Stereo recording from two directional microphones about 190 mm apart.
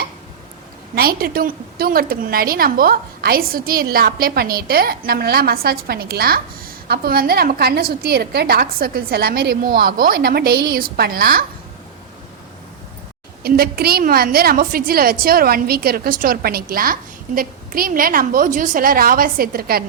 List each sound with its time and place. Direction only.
0.9 s a woman's voice: 50° right (ahead or behind)
13.4 s a woman's voice: 55° right (ahead or behind)